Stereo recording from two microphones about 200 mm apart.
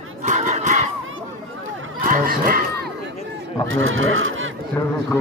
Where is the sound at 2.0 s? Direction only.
45° right (ahead or behind).